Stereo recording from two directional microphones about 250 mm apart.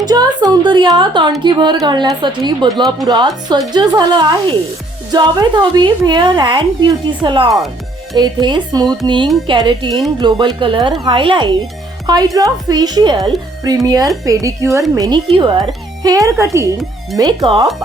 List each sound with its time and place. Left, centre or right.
0.0 s a woman's voice: centre